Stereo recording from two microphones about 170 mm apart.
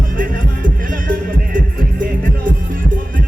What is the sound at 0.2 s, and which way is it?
Music, 55° right (ahead or behind).